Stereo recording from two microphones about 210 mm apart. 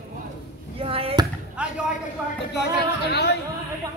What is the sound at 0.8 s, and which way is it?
Basketball bounce, 25° right (ahead or behind).